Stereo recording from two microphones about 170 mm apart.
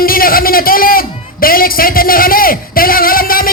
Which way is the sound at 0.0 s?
60° left (ahead or behind).